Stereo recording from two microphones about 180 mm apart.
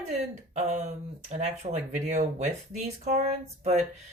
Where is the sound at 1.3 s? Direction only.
40° right (ahead or behind).